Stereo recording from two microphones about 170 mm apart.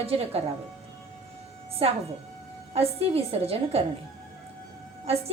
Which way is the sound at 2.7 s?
35° right (ahead or behind).